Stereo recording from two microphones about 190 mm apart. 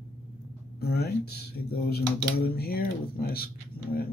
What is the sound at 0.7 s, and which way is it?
Speech, 55° left (ahead or behind).